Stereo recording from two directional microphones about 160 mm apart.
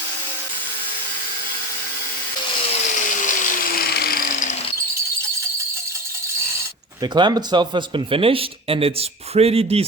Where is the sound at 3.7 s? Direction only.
75° left (ahead or behind).